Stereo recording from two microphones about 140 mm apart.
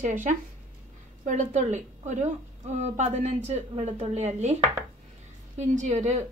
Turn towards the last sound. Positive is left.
turn(degrees=-55)  # may be behind; listen again after turning